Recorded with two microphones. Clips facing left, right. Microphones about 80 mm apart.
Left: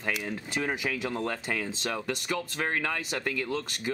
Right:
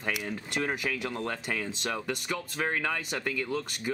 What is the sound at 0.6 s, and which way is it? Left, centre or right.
Speech, centre.